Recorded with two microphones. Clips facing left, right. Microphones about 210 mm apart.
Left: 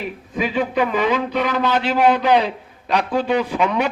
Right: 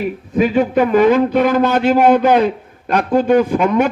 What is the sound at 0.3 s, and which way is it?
A man's voice, 45° right (ahead or behind).